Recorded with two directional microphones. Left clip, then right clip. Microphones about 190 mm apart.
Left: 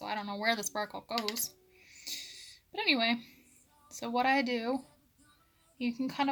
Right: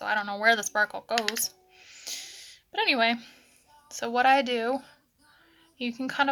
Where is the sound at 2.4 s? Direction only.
40° right (ahead or behind).